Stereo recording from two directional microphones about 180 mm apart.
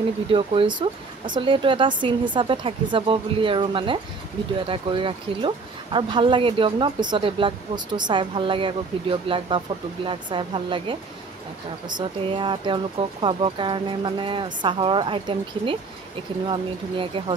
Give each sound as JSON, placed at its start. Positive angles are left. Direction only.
{"t": 0.3, "sound": "speech", "side_deg": -30}
{"t": 12.3, "sound": "speech", "side_deg": -25}